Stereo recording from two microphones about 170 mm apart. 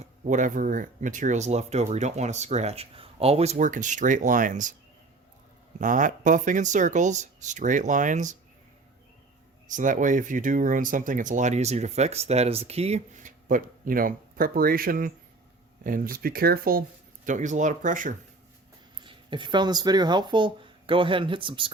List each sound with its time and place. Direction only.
0.0 s speech: 45° right (ahead or behind)
5.8 s speech: 50° right (ahead or behind)
9.6 s speech: 50° right (ahead or behind)
17.2 s speech: 45° right (ahead or behind)
19.0 s speech: 30° right (ahead or behind)